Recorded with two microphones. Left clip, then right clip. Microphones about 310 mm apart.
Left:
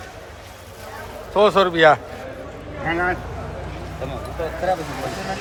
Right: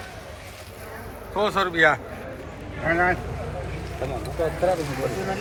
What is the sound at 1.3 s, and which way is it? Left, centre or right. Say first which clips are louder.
Speech: left 6 dB; left.